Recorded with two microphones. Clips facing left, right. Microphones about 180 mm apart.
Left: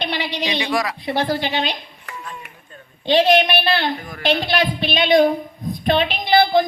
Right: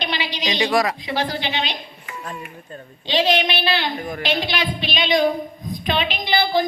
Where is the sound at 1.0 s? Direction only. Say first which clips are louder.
Left 3 dB; 55° left (ahead or behind).